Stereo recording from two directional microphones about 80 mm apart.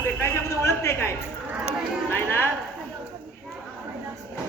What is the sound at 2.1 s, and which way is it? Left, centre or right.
Music, left.